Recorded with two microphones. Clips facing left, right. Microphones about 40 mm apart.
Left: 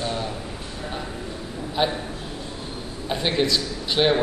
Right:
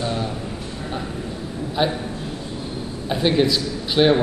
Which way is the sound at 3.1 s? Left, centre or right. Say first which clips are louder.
Right 4 dB; centre.